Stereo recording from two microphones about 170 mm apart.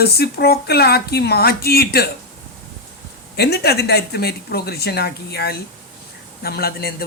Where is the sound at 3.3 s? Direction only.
70° left (ahead or behind).